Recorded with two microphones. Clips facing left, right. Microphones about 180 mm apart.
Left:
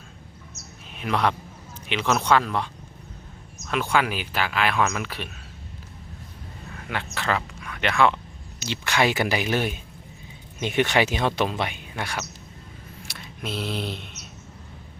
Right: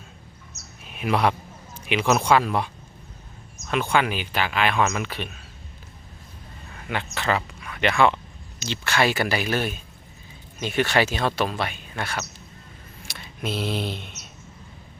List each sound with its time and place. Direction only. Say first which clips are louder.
0.9 s speech: right 2 dB; 10° right (ahead or behind)
3.7 s speech: right 1 dB; centre (ahead or behind)
6.8 s speech: right 2 dB; centre (ahead or behind)
8.5 s speech: even; 10° left (ahead or behind)
13.1 s speech: right 3 dB; centre (ahead or behind)